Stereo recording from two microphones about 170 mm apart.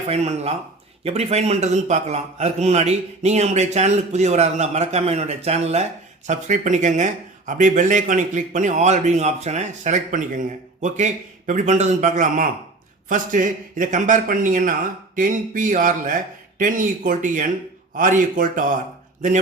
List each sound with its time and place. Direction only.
0.1 s a man's voice: 40° right (ahead or behind)